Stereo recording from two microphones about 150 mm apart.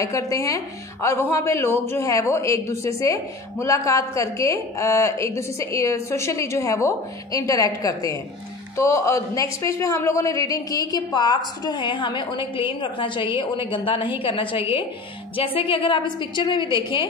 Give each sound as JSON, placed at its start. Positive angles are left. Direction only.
{"t": 0.0, "sound": "a woman's voice", "side_deg": 20}